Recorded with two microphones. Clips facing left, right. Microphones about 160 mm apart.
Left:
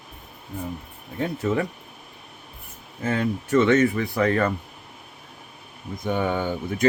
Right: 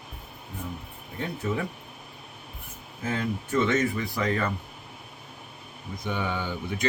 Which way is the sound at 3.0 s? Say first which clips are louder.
Left 5 dB; 70° left (ahead or behind).